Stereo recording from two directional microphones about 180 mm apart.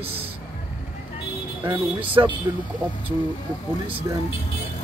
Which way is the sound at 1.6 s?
15° right (ahead or behind).